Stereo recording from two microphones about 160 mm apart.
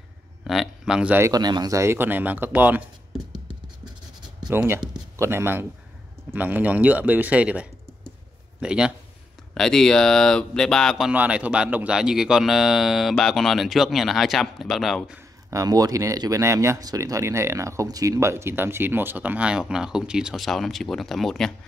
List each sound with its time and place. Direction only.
0.4 s speech: centre (ahead or behind)
1.3 s speech: 25° right (ahead or behind)
4.5 s speech: 5° right (ahead or behind)
15.5 s speech: 20° right (ahead or behind); by 21.5 s centre (ahead or behind)